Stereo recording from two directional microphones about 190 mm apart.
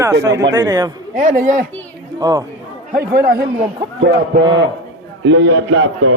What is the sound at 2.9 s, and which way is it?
Speech, 50° right (ahead or behind).